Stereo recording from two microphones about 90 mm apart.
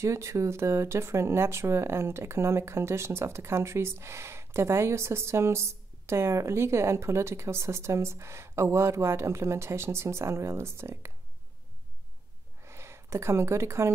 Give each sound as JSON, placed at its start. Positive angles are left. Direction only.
{"t": 0.0, "sound": "speech", "side_deg": -35}
{"t": 12.6, "sound": "speech", "side_deg": -30}